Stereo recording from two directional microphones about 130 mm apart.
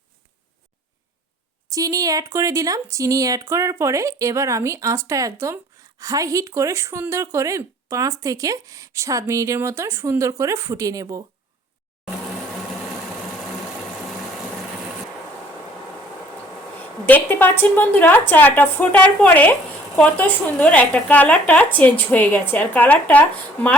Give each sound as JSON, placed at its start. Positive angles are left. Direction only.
{"t": 1.7, "sound": "speech", "side_deg": -25}
{"t": 17.1, "sound": "speech", "side_deg": 15}